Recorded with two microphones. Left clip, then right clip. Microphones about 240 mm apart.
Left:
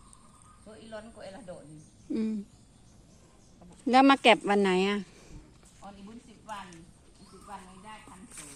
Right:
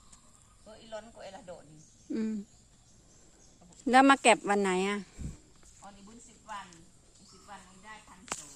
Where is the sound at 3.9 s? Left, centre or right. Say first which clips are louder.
Left 1 dB; centre.